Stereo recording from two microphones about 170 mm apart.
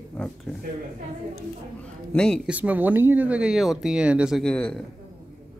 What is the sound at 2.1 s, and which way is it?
Speech, 5° left (ahead or behind).